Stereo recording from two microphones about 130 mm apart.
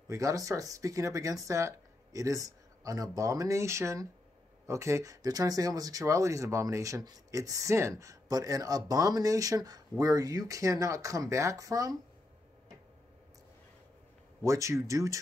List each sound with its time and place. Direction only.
0.1 s speech: 25° right (ahead or behind)
14.4 s speech: 25° right (ahead or behind)